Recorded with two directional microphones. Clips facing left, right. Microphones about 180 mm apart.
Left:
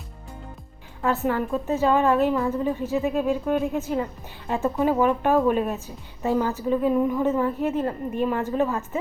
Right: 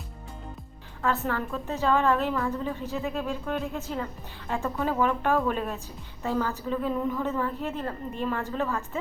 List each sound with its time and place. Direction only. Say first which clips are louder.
1.0 s a woman's voice: left 4 dB; 15° left (ahead or behind)